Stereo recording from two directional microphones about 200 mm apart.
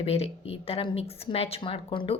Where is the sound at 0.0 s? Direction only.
30° left (ahead or behind).